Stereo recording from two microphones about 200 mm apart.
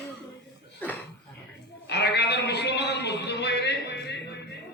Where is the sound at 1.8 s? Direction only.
55° left (ahead or behind).